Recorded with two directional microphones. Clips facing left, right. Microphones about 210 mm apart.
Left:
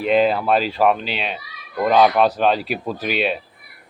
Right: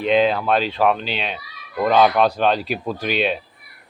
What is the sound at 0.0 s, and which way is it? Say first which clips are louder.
A man's voice: even; 5° left (ahead or behind).